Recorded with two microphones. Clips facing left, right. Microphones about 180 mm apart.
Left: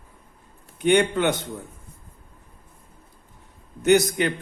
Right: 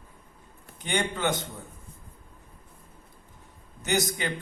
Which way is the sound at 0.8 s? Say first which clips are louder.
Left 9 dB; 65° left (ahead or behind).